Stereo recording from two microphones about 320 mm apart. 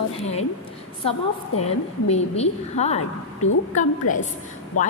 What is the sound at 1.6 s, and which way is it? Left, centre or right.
A woman's voice, centre.